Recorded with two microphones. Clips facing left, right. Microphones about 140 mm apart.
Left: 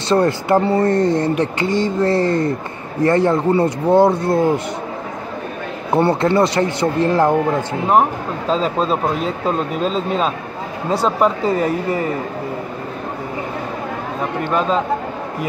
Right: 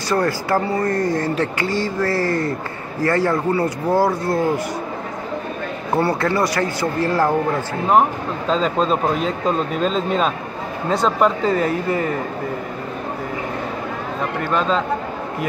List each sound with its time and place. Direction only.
0.1 s speech: 25° left (ahead or behind)
5.9 s speech: 25° left (ahead or behind)
8.5 s speech: 5° left (ahead or behind)
14.5 s speech: 5° left (ahead or behind)